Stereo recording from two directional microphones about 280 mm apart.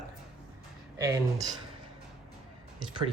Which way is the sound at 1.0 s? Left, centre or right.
Centre.